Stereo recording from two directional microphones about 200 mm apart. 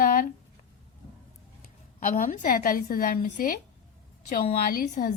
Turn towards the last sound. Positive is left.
turn(degrees=45)  # may be behind; listen again after turning